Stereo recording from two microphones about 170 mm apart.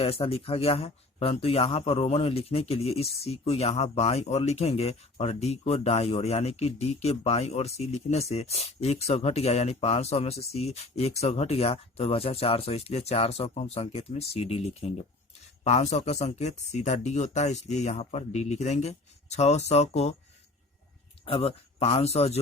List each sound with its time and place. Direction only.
0.0 s speech: 35° left (ahead or behind)
21.2 s speech: 35° left (ahead or behind)